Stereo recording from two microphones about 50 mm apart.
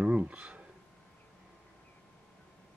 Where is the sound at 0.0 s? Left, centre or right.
Right.